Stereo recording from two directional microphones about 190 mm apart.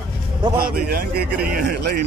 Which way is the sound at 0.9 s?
55° right (ahead or behind).